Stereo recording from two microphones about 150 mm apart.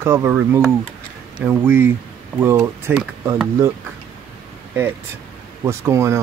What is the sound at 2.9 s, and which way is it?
Speech, 10° right (ahead or behind).